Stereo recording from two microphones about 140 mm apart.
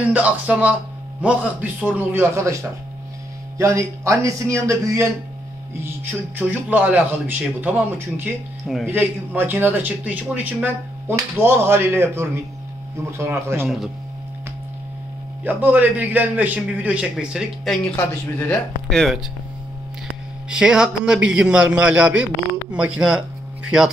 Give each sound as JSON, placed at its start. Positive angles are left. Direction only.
{"t": 0.0, "sound": "a man's voice", "side_deg": -10}
{"t": 15.4, "sound": "speech", "side_deg": -10}
{"t": 18.9, "sound": "speech", "side_deg": 0}
{"t": 20.4, "sound": "speech", "side_deg": -5}